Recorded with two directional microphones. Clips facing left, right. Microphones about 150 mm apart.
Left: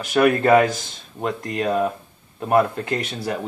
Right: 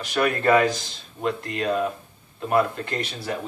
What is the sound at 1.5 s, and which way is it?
Speech, 45° left (ahead or behind).